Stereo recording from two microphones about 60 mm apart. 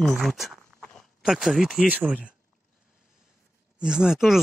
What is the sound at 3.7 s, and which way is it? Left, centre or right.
Speech, centre.